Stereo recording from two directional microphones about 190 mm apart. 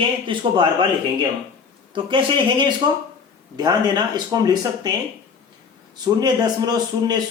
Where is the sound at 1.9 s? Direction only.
25° right (ahead or behind).